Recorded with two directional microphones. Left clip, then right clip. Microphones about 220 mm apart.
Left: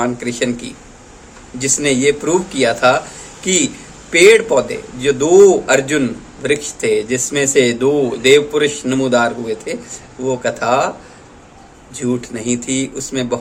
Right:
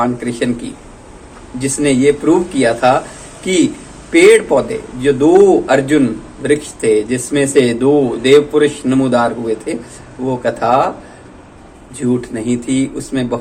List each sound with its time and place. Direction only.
0.0 s a man's voice: 25° left (ahead or behind)
11.9 s speech: 20° left (ahead or behind)